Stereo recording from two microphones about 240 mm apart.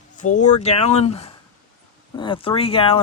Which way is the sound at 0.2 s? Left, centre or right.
Left.